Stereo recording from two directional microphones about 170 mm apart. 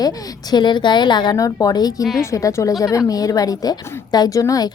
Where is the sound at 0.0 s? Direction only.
25° left (ahead or behind).